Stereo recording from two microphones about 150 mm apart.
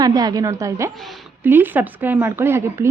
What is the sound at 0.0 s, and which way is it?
Speech, 25° right (ahead or behind).